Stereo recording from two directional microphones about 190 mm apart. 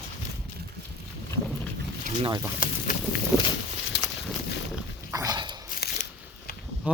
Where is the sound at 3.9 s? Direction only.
65° left (ahead or behind).